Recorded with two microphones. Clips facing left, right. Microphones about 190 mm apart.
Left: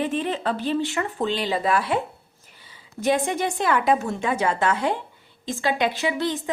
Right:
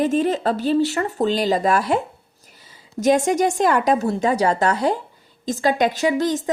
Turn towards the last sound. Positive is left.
turn(degrees=-40)  # may be behind; listen again after turning